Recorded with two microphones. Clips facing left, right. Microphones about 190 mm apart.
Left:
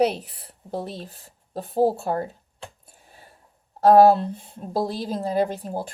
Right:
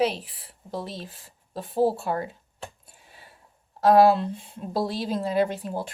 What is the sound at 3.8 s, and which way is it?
Speech, 45° left (ahead or behind).